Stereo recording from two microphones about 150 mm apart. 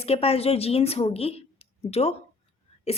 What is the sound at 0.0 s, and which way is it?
A woman's voice, 40° left (ahead or behind).